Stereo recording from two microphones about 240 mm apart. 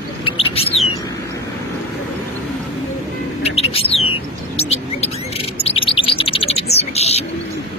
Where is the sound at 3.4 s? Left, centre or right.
Left.